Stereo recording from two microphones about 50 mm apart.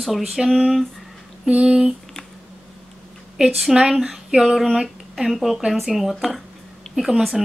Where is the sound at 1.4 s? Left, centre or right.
Centre.